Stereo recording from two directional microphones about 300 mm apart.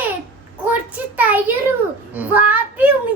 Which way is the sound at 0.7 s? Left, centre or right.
Centre.